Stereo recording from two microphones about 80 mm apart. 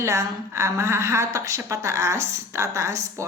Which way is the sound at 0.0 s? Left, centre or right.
Right.